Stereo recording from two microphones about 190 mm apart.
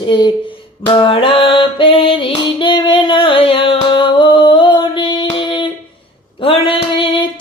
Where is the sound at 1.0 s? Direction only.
25° left (ahead or behind).